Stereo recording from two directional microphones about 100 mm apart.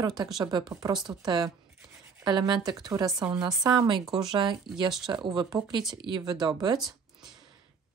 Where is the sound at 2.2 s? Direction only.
45° right (ahead or behind).